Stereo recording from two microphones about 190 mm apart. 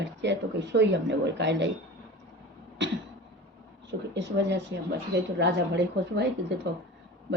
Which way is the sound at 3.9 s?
65° right (ahead or behind).